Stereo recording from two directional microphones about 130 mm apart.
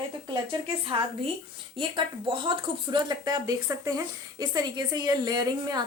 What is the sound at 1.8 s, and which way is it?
Speech, 40° right (ahead or behind).